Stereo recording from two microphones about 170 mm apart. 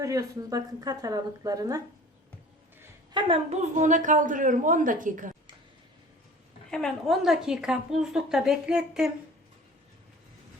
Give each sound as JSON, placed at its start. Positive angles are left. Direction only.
{"t": 0.0, "sound": "speech", "side_deg": -20}
{"t": 3.1, "sound": "a woman's voice", "side_deg": -30}
{"t": 6.7, "sound": "a woman's voice", "side_deg": 5}